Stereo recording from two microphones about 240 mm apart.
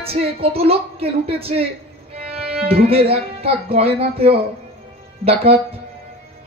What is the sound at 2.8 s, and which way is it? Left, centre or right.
Speech, right.